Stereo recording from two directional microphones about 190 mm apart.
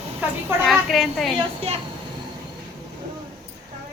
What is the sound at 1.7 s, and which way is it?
Speech, 35° right (ahead or behind).